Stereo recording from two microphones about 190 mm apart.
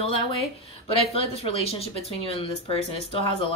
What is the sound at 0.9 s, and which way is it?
Speech, 30° left (ahead or behind).